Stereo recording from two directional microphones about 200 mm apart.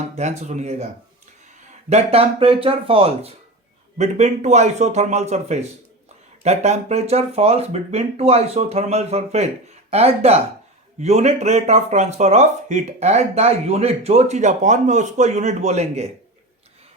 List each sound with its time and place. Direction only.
0.2 s speech: 35° right (ahead or behind)
1.9 s speech: 30° right (ahead or behind)